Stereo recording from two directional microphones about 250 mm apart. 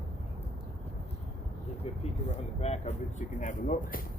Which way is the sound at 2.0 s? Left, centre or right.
Left.